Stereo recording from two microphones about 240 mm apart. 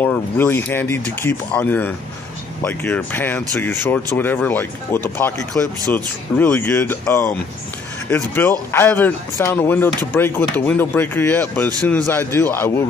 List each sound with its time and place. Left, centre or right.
0.0 s speech: centre